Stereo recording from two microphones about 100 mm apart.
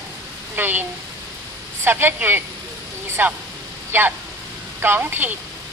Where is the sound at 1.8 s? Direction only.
20° right (ahead or behind).